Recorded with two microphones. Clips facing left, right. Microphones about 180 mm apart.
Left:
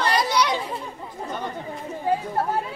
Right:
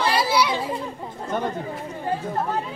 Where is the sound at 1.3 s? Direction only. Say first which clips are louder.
Right 6 dB; 50° right (ahead or behind).